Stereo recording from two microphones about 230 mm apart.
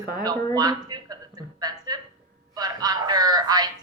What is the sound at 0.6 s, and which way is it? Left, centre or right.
A woman's voice, centre.